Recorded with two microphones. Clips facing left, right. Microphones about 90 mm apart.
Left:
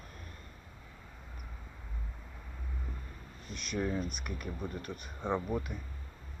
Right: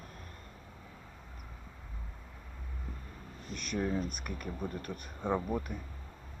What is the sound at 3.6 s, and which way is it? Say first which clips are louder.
Speech: right 1 dB; 45° right (ahead or behind).